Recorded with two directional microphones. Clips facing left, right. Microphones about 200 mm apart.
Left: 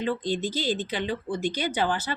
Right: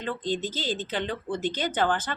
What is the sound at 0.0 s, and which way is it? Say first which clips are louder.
Speech: left 2 dB; 10° left (ahead or behind).